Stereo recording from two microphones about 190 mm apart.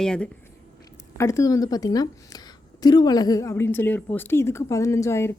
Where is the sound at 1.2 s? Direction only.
15° left (ahead or behind).